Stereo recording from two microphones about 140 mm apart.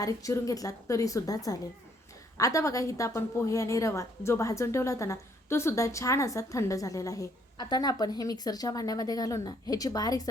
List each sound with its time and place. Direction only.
0.0 s a woman's voice: 25° left (ahead or behind)